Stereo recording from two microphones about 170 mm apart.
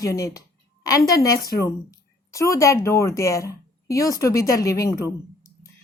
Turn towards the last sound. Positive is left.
turn(degrees=20)  # may be behind; listen again after turning